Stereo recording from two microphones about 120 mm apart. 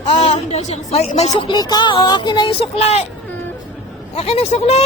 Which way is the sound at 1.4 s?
40° left (ahead or behind).